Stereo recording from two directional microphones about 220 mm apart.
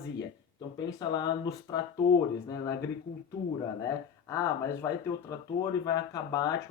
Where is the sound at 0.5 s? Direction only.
20° left (ahead or behind).